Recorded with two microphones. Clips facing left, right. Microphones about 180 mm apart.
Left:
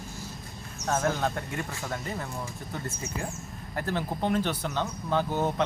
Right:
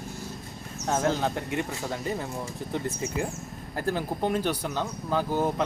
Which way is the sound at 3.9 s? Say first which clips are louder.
Right 1 dB; 10° right (ahead or behind).